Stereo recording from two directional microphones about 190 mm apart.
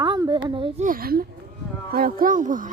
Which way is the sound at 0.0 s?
20° right (ahead or behind).